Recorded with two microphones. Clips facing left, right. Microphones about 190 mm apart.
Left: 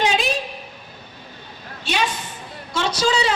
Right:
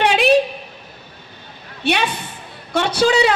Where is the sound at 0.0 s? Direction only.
65° right (ahead or behind).